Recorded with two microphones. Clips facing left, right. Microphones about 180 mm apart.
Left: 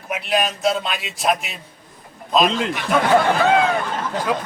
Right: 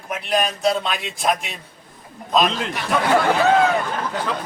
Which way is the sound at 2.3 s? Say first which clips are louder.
Left 2 dB; centre (ahead or behind).